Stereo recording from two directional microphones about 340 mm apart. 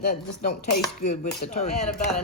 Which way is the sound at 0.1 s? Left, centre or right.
Left.